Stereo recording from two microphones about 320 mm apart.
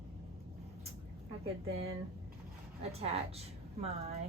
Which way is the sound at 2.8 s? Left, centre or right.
Centre.